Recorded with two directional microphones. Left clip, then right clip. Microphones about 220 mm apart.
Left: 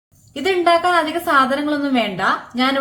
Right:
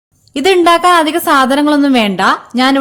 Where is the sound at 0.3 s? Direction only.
50° right (ahead or behind).